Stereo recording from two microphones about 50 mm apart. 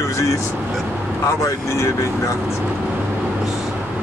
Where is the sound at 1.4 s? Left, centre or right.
Left.